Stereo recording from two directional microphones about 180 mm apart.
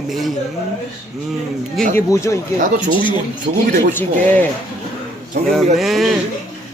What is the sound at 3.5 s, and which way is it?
Speech, 45° right (ahead or behind).